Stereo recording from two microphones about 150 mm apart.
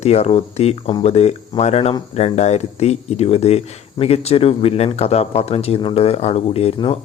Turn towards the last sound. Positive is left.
turn(degrees=40)  # may be behind; listen again after turning